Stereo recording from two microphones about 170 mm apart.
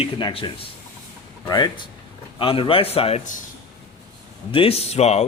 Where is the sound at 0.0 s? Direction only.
30° left (ahead or behind).